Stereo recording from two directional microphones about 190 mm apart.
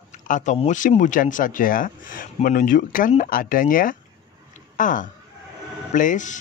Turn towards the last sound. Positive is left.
turn(degrees=40)  # may be behind; listen again after turning